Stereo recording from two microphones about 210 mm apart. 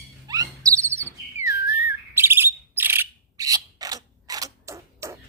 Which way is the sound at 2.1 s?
10° right (ahead or behind).